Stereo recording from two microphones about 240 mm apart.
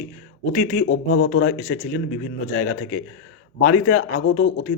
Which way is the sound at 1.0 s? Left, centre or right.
Left.